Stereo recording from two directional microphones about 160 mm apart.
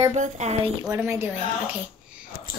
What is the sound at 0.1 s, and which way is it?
Speech, 45° right (ahead or behind).